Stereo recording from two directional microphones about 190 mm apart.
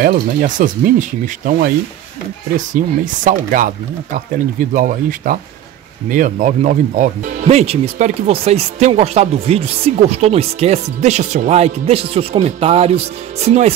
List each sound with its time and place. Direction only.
0.0 s speech: 50° right (ahead or behind)
2.8 s speech: 45° right (ahead or behind)